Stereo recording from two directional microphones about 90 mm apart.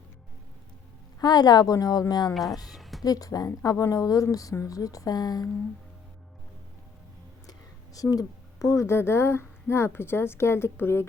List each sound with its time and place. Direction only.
1.2 s a woman's voice: 50° left (ahead or behind)
2.3 s speech: centre (ahead or behind)
2.7 s a sound: centre (ahead or behind)
3.0 s speech: 40° left (ahead or behind)
8.1 s speech: 40° left (ahead or behind); by 11.0 s 25° left (ahead or behind)